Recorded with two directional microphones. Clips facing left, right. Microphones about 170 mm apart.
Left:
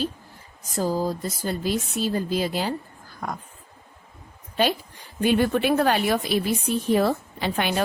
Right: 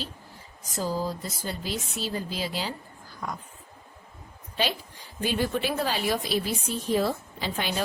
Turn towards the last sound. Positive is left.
turn(degrees=60)  # may be behind; listen again after turning